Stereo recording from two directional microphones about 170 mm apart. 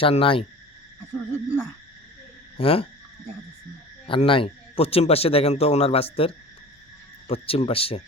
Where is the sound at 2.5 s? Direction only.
35° left (ahead or behind).